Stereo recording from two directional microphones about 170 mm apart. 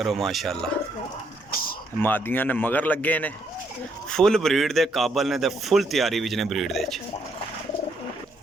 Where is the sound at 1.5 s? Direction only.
60° left (ahead or behind).